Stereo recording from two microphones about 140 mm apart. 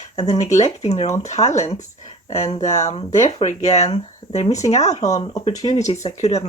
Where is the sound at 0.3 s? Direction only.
55° left (ahead or behind).